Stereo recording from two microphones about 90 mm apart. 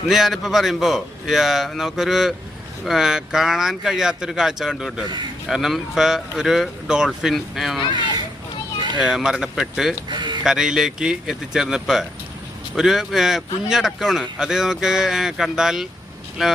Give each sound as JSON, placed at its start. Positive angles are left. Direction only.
{"t": 0.1, "sound": "a man's voice", "side_deg": -5}
{"t": 9.0, "sound": "a man's voice", "side_deg": -5}
{"t": 10.1, "sound": "speech", "side_deg": -55}
{"t": 10.4, "sound": "a man's voice", "side_deg": -5}